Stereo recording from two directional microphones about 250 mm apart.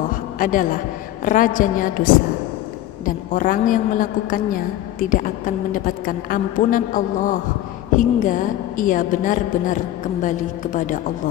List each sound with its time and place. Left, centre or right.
0.4 s a woman's voice: left
3.1 s a woman's voice: left